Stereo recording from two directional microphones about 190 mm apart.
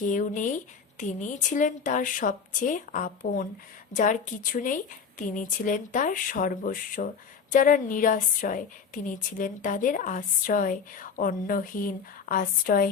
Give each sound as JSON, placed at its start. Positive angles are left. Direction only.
{"t": 0.0, "sound": "a woman's voice", "side_deg": 40}